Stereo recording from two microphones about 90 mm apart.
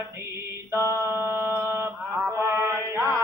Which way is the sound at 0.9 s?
30° right (ahead or behind).